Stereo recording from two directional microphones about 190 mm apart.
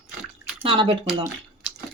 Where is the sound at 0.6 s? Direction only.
25° right (ahead or behind).